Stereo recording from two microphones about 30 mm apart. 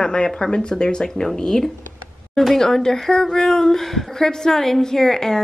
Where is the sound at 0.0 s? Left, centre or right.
Left.